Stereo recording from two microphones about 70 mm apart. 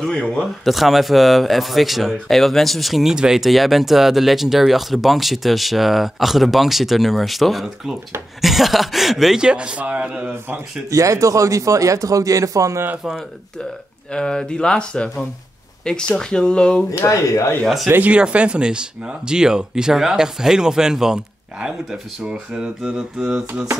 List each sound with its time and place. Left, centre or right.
0.0 s speech: centre
0.4 s a man's voice: centre
10.9 s a man's voice: right
14.1 s speech: centre
17.1 s speech: left
17.8 s speech: right
18.1 s speech: centre